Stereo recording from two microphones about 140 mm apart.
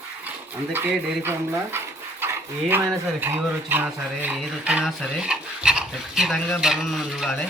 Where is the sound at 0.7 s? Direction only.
15° right (ahead or behind).